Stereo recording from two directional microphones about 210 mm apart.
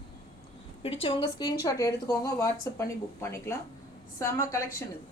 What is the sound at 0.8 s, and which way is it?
A woman's voice, 25° left (ahead or behind).